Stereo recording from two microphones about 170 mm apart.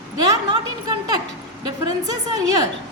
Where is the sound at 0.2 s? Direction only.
25° right (ahead or behind).